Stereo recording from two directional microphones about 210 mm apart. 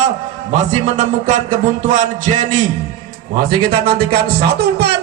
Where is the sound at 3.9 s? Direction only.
50° right (ahead or behind).